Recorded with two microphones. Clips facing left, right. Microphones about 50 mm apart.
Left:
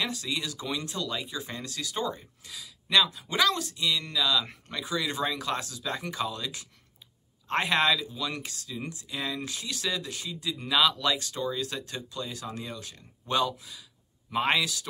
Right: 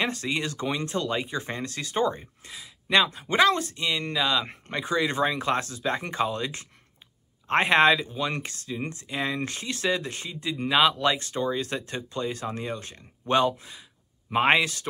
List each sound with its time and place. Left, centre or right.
0.0 s speech: right